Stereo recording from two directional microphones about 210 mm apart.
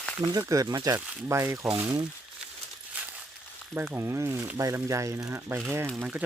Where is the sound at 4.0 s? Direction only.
15° right (ahead or behind).